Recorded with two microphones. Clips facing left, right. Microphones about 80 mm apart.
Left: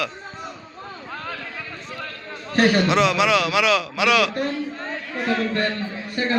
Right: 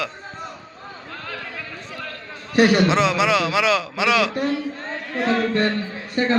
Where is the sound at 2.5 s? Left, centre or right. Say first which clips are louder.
Right 2 dB; centre.